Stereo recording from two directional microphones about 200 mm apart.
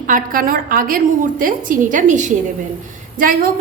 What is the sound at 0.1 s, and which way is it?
A woman's voice, 45° right (ahead or behind).